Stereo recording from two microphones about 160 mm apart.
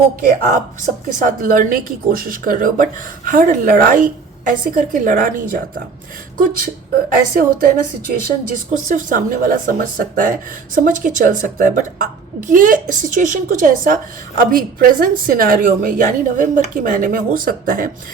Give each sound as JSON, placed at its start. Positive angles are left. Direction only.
{"t": 1.2, "sound": "a woman's voice", "side_deg": -60}
{"t": 7.1, "sound": "a woman's voice", "side_deg": -60}